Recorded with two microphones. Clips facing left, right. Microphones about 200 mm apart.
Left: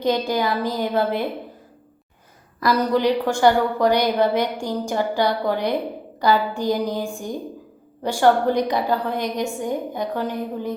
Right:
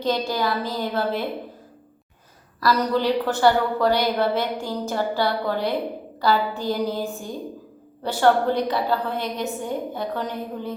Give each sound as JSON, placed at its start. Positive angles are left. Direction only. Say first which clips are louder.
{"t": 0.0, "sound": "a woman's voice", "louder": "left 3 dB", "side_deg": 15}
{"t": 2.6, "sound": "a woman's voice", "louder": "left 2 dB", "side_deg": 15}